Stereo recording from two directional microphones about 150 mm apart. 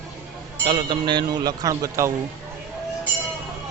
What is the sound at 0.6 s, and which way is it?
Speech, 30° right (ahead or behind).